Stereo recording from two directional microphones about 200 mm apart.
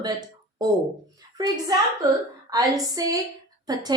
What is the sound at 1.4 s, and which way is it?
A woman's voice, 20° right (ahead or behind).